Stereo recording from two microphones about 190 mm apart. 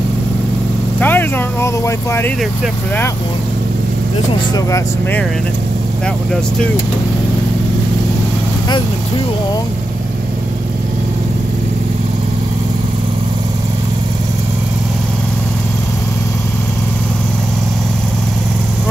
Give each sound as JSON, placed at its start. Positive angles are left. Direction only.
{"t": 0.9, "sound": "speech", "side_deg": 10}
{"t": 4.6, "sound": "speech", "side_deg": 15}